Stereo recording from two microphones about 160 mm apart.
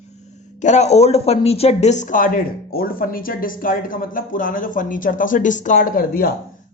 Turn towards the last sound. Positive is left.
turn(degrees=65)  # may be behind; listen again after turning